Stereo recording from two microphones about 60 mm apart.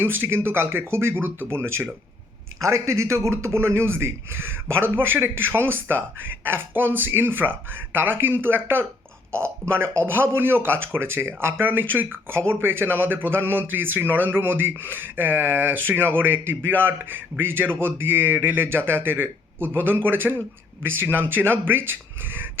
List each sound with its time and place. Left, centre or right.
0.0 s speech: right
2.6 s speech: right